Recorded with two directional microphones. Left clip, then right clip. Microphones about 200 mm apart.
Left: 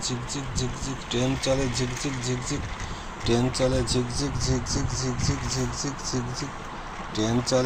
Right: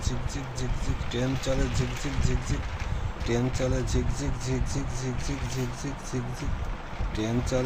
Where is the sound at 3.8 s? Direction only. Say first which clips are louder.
Left 5 dB; 25° right (ahead or behind).